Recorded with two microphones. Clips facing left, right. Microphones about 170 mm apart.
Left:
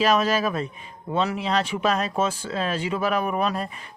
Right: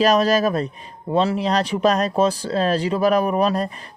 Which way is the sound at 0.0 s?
40° right (ahead or behind).